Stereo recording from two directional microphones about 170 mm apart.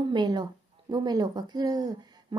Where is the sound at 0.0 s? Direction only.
25° right (ahead or behind).